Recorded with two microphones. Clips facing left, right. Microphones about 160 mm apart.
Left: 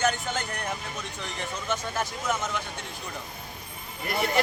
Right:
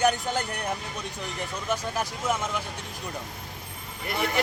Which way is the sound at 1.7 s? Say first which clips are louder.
Right 1 dB; 10° right (ahead or behind).